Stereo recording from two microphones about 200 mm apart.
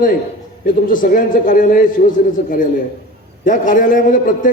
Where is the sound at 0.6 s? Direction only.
45° left (ahead or behind).